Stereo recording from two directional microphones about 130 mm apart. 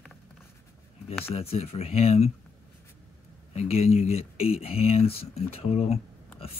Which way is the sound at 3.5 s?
55° left (ahead or behind).